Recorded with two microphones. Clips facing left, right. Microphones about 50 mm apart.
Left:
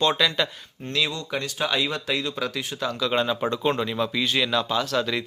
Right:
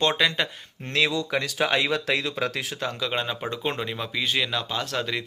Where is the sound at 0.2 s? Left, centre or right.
Right.